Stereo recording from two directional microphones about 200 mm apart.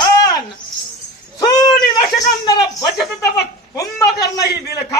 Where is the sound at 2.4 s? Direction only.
20° left (ahead or behind).